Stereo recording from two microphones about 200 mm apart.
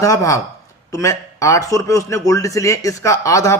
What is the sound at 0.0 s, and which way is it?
A man's voice, 15° left (ahead or behind).